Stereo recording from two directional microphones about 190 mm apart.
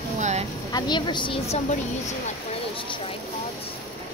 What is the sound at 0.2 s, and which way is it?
Vehicle, 35° right (ahead or behind).